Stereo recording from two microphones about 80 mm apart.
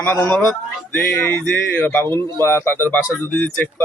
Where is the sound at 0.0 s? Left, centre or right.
Left.